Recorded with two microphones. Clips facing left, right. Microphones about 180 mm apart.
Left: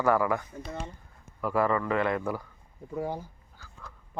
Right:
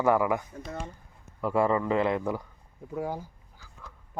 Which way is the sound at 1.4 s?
25° right (ahead or behind).